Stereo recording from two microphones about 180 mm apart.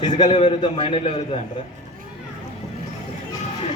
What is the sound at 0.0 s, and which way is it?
A man's voice, 30° left (ahead or behind).